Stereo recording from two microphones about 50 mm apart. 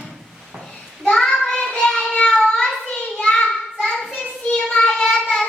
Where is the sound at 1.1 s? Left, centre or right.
Centre.